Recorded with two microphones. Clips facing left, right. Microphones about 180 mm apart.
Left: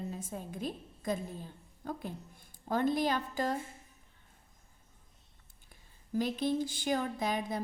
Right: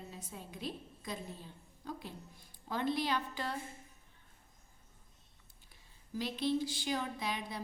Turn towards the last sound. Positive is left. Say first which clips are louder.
# left 6 dB
turn(degrees=45)  # may be behind; listen again after turning